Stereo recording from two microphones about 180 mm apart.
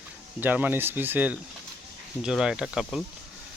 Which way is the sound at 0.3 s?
10° right (ahead or behind).